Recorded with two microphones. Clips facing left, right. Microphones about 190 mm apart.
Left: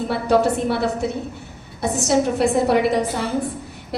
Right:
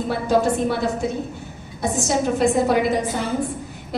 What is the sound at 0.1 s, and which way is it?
A woman's voice, 65° left (ahead or behind).